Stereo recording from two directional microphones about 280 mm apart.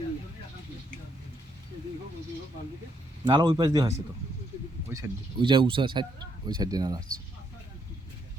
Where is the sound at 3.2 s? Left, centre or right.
Centre.